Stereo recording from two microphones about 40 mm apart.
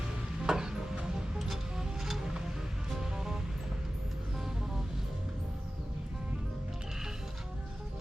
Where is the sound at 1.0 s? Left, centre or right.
Centre.